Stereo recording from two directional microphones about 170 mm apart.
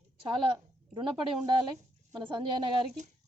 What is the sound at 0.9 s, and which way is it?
A woman's voice, 30° right (ahead or behind).